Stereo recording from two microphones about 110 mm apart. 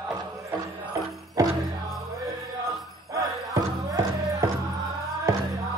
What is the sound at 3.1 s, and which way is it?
Music, 30° right (ahead or behind).